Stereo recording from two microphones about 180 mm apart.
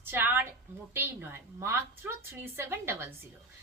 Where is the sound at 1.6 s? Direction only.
15° right (ahead or behind).